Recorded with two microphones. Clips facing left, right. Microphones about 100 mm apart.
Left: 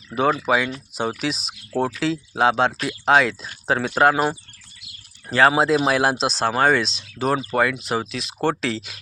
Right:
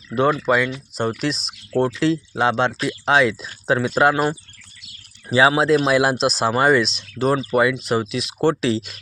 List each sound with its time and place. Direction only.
0.3 s speech: 5° left (ahead or behind)